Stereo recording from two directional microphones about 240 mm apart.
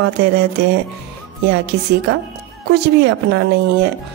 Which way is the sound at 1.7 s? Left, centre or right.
Right.